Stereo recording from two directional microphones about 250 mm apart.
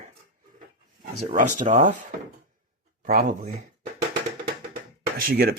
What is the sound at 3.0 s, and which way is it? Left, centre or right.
Speech, right.